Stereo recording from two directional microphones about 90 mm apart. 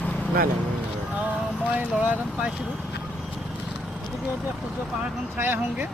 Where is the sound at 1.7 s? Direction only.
15° right (ahead or behind).